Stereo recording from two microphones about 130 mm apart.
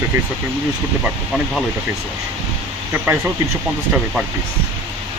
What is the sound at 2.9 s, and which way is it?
Speech, 15° right (ahead or behind).